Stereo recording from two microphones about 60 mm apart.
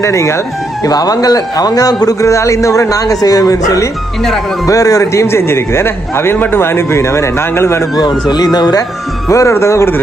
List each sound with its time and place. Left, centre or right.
0.0 s speech: left
0.8 s a man's voice: left
9.3 s speech: left